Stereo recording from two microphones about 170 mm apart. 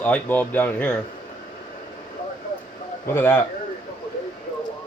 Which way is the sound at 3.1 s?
15° left (ahead or behind).